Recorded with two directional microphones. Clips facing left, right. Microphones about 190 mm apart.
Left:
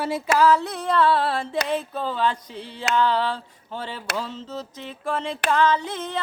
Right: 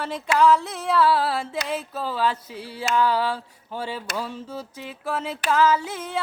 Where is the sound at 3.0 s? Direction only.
10° right (ahead or behind).